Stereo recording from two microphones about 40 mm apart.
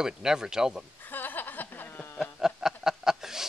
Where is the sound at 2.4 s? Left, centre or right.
Centre.